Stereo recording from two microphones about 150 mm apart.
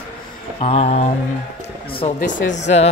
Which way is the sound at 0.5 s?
40° left (ahead or behind).